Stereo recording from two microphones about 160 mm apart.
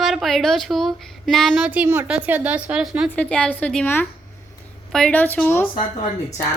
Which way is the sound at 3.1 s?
10° left (ahead or behind).